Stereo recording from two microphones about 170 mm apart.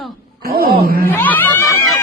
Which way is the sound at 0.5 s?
65° right (ahead or behind).